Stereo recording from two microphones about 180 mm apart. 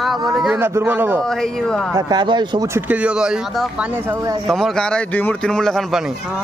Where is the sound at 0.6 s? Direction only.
15° right (ahead or behind).